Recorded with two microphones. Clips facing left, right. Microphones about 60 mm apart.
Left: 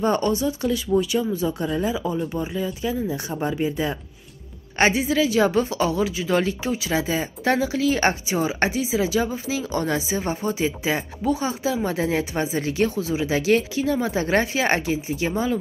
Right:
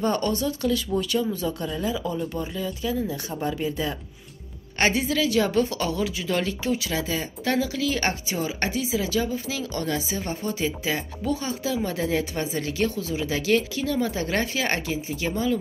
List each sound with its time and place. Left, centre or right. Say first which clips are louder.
0.0 s a woman's voice: left 3 dB; centre